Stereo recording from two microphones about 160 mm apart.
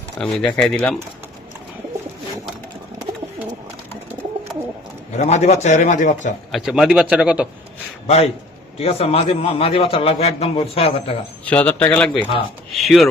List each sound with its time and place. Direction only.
0.2 s a man's voice: 5° left (ahead or behind)
5.1 s a man's voice: 45° left (ahead or behind)
6.5 s a man's voice: centre (ahead or behind)
8.0 s a man's voice: 40° left (ahead or behind)
11.4 s speech: 10° left (ahead or behind)
12.7 s chopping: centre (ahead or behind)